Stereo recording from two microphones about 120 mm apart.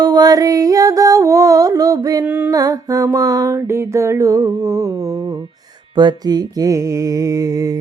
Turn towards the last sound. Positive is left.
turn(degrees=-30)  # may be behind; listen again after turning